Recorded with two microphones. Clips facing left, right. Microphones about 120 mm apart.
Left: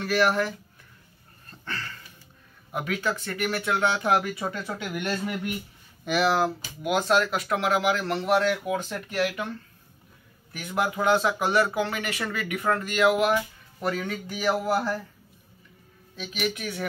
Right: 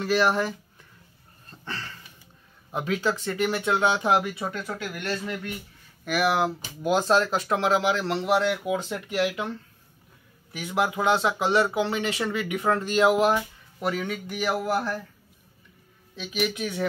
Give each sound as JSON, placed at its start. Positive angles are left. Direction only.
{"t": 0.0, "sound": "a man's voice", "side_deg": -20}
{"t": 1.5, "sound": "a sound", "side_deg": -25}
{"t": 2.7, "sound": "a man's voice", "side_deg": -25}
{"t": 4.3, "sound": "speech", "side_deg": -5}
{"t": 5.0, "sound": "speech", "side_deg": 15}
{"t": 6.0, "sound": "speech", "side_deg": -5}
{"t": 6.3, "sound": "speech", "side_deg": -15}
{"t": 6.8, "sound": "a man's voice", "side_deg": -35}
{"t": 10.5, "sound": "a man's voice", "side_deg": -10}
{"t": 13.7, "sound": "speech", "side_deg": -10}
{"t": 14.6, "sound": "speech", "side_deg": 5}
{"t": 16.5, "sound": "a man's voice", "side_deg": -20}